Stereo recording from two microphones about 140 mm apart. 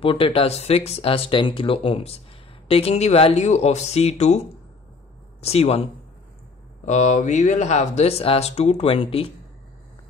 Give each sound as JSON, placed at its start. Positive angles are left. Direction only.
{"t": 0.0, "sound": "speech", "side_deg": 40}
{"t": 5.4, "sound": "speech", "side_deg": 45}
{"t": 6.9, "sound": "speech", "side_deg": 55}